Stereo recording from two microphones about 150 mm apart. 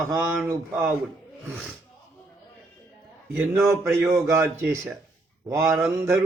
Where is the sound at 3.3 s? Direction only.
15° right (ahead or behind).